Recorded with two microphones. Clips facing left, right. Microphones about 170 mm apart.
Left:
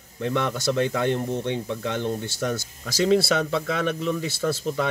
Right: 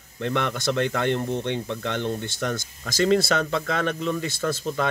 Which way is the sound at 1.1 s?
5° left (ahead or behind).